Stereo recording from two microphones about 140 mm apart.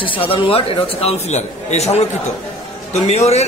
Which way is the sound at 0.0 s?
40° left (ahead or behind).